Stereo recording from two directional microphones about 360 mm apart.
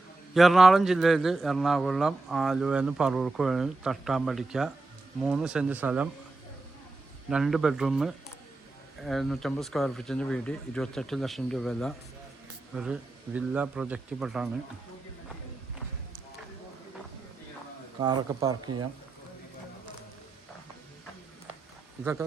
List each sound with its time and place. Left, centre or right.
0.3 s a man's voice: centre
7.3 s a man's voice: centre
18.0 s speech: centre